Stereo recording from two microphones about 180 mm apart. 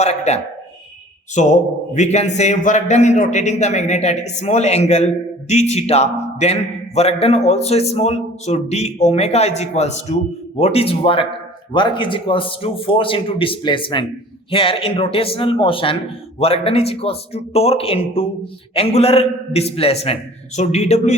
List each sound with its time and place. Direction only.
0.0 s a man's voice: 35° left (ahead or behind)